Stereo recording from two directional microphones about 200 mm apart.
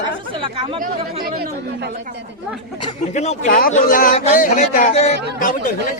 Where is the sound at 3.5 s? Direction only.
45° left (ahead or behind).